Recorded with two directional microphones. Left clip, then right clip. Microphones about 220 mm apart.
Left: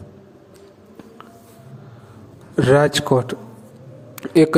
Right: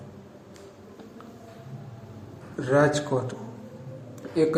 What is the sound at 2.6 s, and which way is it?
Speech, 40° left (ahead or behind).